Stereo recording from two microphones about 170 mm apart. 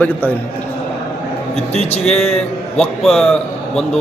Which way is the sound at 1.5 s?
40° left (ahead or behind).